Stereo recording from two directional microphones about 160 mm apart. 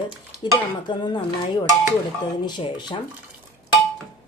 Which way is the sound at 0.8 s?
30° left (ahead or behind).